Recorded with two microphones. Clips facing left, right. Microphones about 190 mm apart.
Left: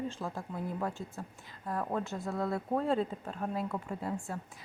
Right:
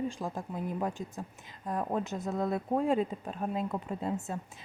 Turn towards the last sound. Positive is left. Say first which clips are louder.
# right 3 dB
turn(degrees=-20)  # may be behind; listen again after turning